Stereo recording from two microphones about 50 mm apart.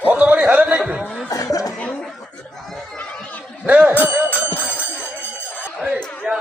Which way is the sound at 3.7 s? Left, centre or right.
Right.